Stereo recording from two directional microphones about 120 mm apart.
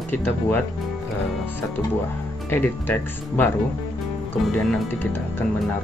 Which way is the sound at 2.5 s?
15° left (ahead or behind).